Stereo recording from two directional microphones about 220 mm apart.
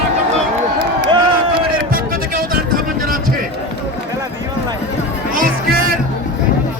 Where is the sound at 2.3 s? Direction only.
40° right (ahead or behind).